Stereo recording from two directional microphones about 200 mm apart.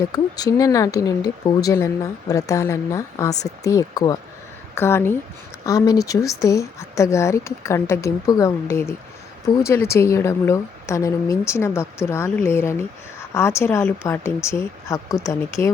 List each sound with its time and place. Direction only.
0.1 s speech: 20° left (ahead or behind)